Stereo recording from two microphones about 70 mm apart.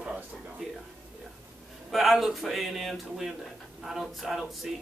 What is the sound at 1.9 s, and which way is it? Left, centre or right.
Speech, centre.